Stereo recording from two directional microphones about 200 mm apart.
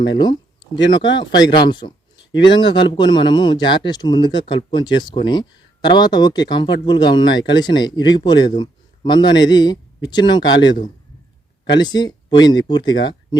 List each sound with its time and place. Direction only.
0.9 s a man's voice: 20° left (ahead or behind)